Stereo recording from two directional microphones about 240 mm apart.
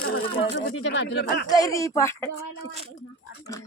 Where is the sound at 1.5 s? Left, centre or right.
Centre.